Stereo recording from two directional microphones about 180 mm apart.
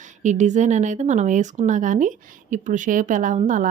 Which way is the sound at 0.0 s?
40° right (ahead or behind).